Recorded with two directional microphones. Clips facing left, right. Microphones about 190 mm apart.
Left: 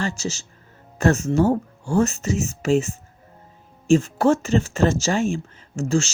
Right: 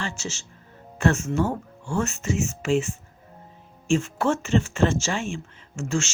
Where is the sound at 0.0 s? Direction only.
40° left (ahead or behind).